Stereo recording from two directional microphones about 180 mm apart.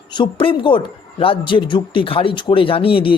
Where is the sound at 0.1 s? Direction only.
25° left (ahead or behind).